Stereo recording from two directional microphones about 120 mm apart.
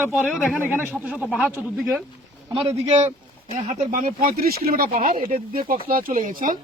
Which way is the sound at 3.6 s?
85° right.